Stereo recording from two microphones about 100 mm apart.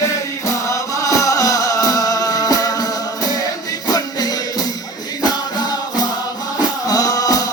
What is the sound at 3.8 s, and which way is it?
Music, 40° left (ahead or behind).